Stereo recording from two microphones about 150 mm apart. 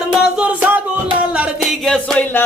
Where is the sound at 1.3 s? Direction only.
5° right (ahead or behind).